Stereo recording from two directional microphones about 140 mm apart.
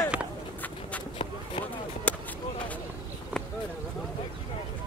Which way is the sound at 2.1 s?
10° left (ahead or behind).